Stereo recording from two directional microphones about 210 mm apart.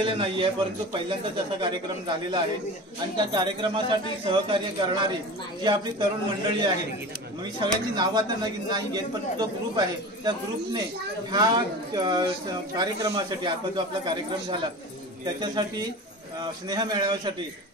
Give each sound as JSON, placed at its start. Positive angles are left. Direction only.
{"t": 0.0, "sound": "speech", "side_deg": -25}
{"t": 1.6, "sound": "speech", "side_deg": -20}